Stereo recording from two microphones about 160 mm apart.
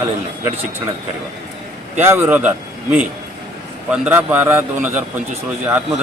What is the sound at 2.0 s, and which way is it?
A man's voice, 15° right (ahead or behind).